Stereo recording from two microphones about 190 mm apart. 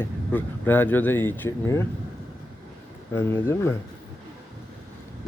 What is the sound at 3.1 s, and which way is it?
Speech, 15° left (ahead or behind).